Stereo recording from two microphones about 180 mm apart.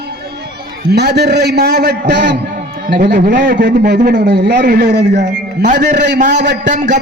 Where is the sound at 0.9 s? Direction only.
65° right (ahead or behind).